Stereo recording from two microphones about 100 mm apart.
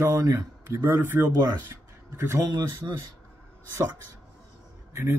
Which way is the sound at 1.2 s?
45° right (ahead or behind).